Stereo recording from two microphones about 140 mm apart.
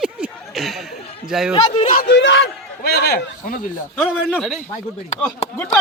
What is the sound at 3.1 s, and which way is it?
Speech, 75° left (ahead or behind).